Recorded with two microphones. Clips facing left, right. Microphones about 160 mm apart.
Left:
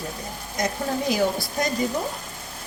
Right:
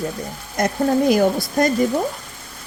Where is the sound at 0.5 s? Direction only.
55° right (ahead or behind).